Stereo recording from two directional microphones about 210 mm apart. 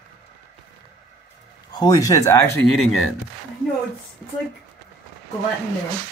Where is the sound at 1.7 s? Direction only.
20° left (ahead or behind).